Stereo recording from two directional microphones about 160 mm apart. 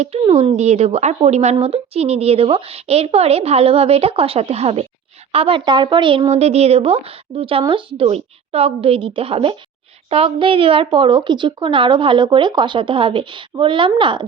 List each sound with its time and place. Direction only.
0.0 s speech: 35° right (ahead or behind)